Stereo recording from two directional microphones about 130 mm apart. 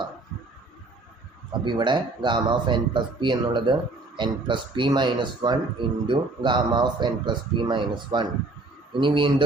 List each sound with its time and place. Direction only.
1.6 s speech: 35° right (ahead or behind)